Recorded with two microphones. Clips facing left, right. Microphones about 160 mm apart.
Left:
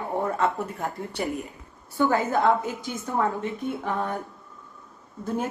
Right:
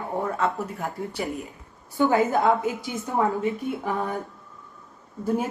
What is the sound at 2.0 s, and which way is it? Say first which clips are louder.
Speech: right 1 dB; 15° right (ahead or behind).